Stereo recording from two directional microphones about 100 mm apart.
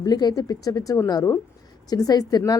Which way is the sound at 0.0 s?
45° left (ahead or behind).